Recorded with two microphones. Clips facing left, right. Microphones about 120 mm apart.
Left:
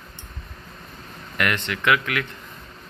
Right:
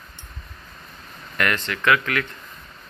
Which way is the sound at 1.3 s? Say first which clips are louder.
Right 1 dB; 15° left (ahead or behind).